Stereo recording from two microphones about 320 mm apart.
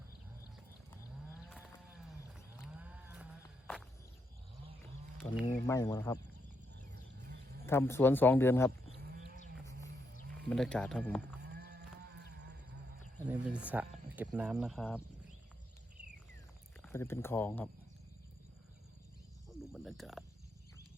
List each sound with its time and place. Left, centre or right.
2.6 s a sound: centre
3.7 s walk: centre
5.5 s speech: centre
7.7 s speech: centre
10.5 s speech: centre
11.4 s livestock: right
13.2 s speech: centre
16.8 s speech: centre
19.5 s speech: centre